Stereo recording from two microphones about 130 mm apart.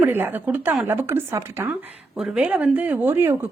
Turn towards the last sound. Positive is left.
turn(degrees=-15)  # may be behind; listen again after turning